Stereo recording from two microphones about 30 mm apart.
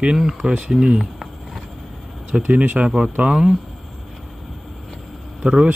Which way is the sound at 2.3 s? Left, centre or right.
Right.